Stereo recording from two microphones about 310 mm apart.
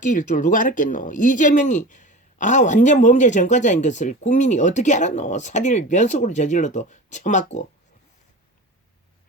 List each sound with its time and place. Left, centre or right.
0.0 s speech: left